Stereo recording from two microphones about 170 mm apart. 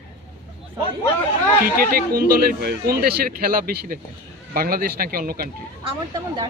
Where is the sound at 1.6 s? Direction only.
60° right (ahead or behind).